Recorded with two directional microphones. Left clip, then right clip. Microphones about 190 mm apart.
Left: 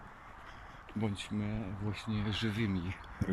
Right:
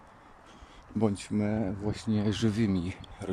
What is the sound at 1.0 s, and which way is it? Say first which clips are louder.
Speech: right 9 dB; 35° right (ahead or behind).